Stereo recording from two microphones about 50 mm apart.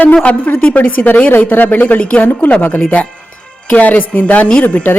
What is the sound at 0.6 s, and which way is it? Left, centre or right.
A woman's voice, left.